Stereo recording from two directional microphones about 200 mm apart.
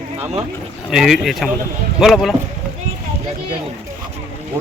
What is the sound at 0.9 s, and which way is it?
Speech, centre (ahead or behind).